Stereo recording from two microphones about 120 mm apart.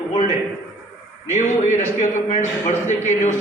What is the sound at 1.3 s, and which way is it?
A man's voice, 85° left.